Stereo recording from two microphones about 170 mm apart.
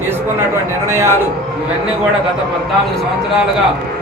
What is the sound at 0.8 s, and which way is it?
Speech, 15° right (ahead or behind).